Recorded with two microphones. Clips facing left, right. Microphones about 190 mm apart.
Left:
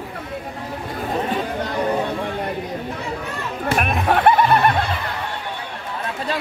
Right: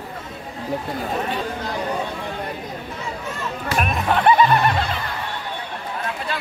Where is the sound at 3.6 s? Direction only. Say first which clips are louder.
Left 2 dB; 55° left (ahead or behind).